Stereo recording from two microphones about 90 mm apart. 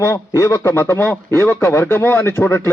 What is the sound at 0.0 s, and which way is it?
Speech, 35° left (ahead or behind).